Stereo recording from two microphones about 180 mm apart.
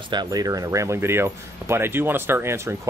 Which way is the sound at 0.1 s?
20° right (ahead or behind).